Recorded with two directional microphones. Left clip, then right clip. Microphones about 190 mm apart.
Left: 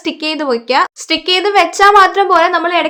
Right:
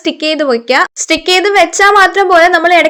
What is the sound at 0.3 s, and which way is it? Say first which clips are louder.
A woman's voice: right 4 dB; 15° right (ahead or behind).